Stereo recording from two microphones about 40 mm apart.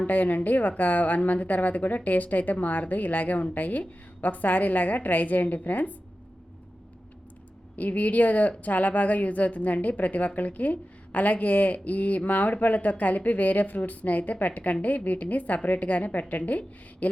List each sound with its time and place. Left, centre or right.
0.1 s a woman's voice: left
7.8 s a woman's voice: left